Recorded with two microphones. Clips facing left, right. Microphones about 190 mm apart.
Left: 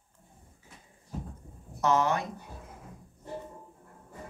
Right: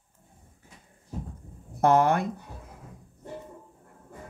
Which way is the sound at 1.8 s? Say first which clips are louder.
Right 5 dB; 55° right (ahead or behind).